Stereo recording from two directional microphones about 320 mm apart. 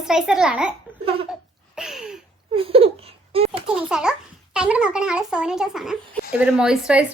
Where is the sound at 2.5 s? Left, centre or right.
Centre.